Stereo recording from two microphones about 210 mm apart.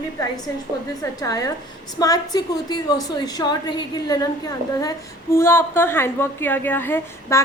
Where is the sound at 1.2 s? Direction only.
15° left (ahead or behind).